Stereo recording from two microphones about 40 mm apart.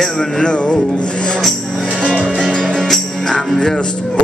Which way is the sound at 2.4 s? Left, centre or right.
Left.